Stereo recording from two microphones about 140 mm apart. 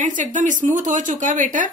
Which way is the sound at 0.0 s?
65° right (ahead or behind).